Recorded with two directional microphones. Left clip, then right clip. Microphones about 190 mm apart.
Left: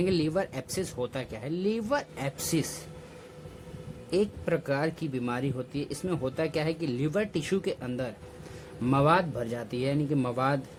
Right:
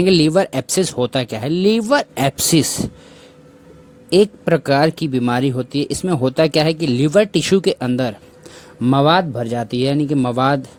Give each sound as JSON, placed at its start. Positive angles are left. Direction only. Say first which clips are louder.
{"t": 0.0, "sound": "speech", "louder": "right 14 dB", "side_deg": -40}
{"t": 4.1, "sound": "speech", "louder": "right 14 dB", "side_deg": -45}